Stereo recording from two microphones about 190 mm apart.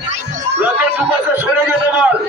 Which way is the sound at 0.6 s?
10° right (ahead or behind).